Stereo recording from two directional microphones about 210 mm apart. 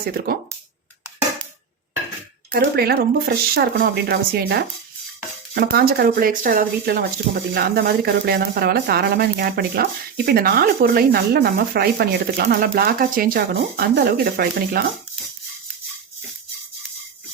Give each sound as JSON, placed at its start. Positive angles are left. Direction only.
{"t": 0.3, "sound": "speech", "side_deg": -45}
{"t": 2.5, "sound": "speech", "side_deg": -45}
{"t": 5.7, "sound": "speech", "side_deg": -45}